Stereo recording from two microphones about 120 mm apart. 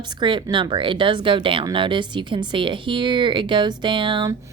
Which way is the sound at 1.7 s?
45° right (ahead or behind).